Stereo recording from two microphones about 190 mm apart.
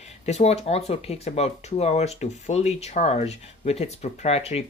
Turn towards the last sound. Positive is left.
turn(degrees=35)  # may be behind; listen again after turning